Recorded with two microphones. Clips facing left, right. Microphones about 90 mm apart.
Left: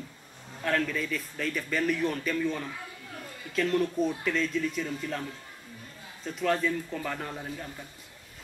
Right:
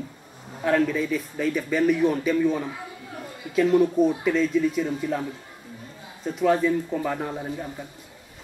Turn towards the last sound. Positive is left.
turn(degrees=-15)  # may be behind; listen again after turning